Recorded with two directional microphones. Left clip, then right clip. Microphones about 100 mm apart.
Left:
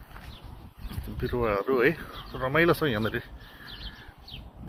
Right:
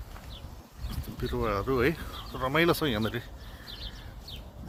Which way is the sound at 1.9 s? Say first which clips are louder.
Left 1 dB; 65° right (ahead or behind).